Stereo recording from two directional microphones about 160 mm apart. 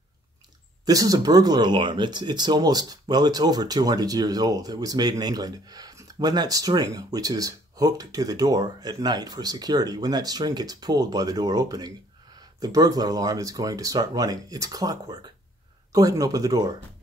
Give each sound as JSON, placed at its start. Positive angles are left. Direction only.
{"t": 0.8, "sound": "speech", "side_deg": -20}